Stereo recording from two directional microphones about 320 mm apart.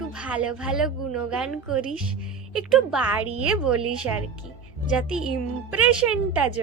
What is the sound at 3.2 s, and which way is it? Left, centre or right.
Speech, right.